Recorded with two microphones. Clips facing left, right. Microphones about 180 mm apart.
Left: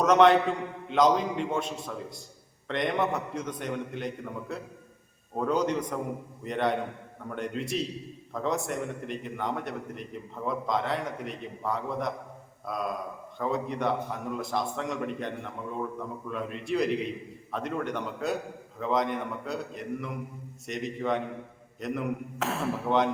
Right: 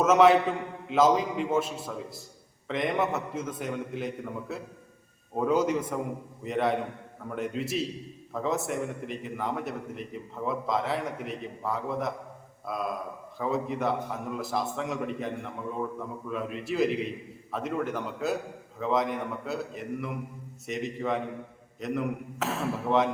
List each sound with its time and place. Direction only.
0.0 s a man's voice: 5° right (ahead or behind)